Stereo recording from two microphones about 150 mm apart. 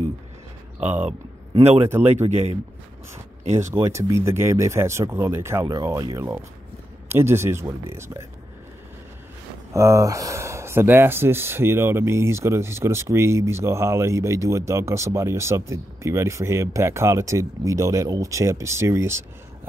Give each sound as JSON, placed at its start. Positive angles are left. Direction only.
{"t": 1.6, "sound": "a man's voice", "side_deg": -45}
{"t": 3.5, "sound": "speech", "side_deg": -20}
{"t": 9.8, "sound": "speech", "side_deg": -20}